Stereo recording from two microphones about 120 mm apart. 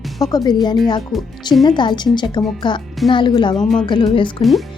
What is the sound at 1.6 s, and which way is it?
Speech, 40° left (ahead or behind).